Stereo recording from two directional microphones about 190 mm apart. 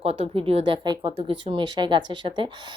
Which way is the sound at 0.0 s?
30° right (ahead or behind).